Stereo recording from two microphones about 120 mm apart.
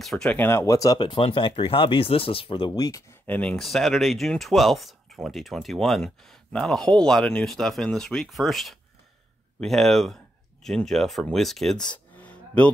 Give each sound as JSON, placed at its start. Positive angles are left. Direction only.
{"t": 0.0, "sound": "speech", "side_deg": 5}
{"t": 0.4, "sound": "speech", "side_deg": 20}
{"t": 0.9, "sound": "speech", "side_deg": 45}
{"t": 3.3, "sound": "speech", "side_deg": 10}